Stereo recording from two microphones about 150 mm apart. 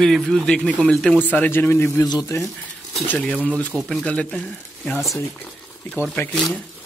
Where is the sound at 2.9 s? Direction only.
5° left (ahead or behind).